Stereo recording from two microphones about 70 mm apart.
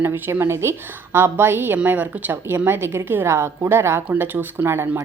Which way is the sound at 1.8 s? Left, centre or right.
Right.